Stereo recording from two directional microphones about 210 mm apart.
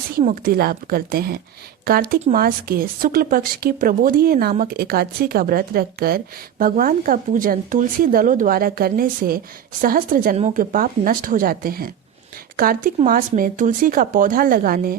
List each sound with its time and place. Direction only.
0.1 s a woman's voice: 40° right (ahead or behind)